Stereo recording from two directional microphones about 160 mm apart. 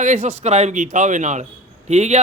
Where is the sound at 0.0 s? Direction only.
45° right (ahead or behind).